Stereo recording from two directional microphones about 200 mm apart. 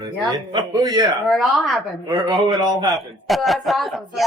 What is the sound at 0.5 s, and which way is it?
Speech, 20° right (ahead or behind).